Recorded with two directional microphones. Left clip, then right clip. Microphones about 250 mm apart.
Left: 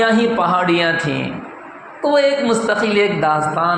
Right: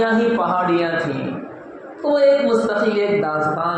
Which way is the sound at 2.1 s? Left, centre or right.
Left.